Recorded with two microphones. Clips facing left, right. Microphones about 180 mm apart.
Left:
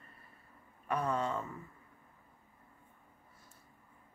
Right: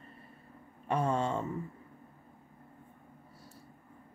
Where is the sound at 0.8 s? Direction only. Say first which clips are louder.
Right 3 dB; 30° right (ahead or behind).